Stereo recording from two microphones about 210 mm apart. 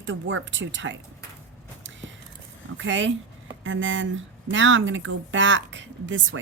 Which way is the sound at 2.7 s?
60° right (ahead or behind).